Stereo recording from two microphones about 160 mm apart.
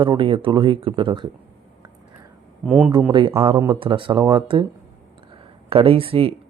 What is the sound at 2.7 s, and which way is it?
Speech, 10° right (ahead or behind).